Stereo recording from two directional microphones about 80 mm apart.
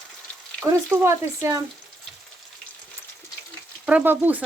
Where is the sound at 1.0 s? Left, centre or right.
Right.